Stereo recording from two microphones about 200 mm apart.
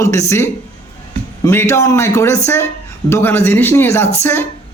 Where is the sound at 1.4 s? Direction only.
15° left (ahead or behind).